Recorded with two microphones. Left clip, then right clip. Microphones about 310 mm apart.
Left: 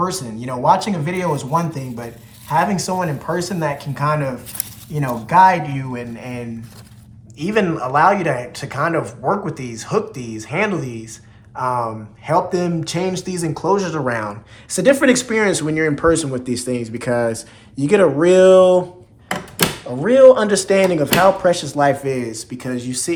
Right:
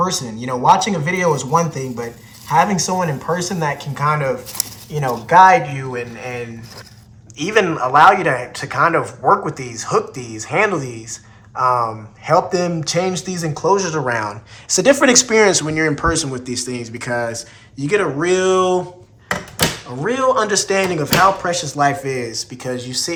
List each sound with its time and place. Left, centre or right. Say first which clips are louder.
0.0 s speech: right 2 dB; centre
20.0 s speech: left 7 dB; centre